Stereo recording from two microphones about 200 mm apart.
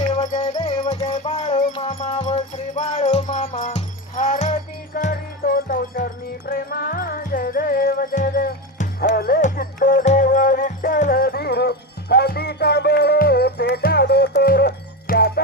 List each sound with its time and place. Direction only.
0.1 s music: 35° left (ahead or behind)
0.5 s music: 20° left (ahead or behind)
0.8 s music: 35° left (ahead or behind); by 15.3 s 50° left (ahead or behind)